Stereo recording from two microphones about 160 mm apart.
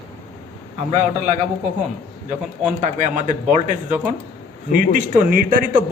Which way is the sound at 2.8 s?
50° right (ahead or behind).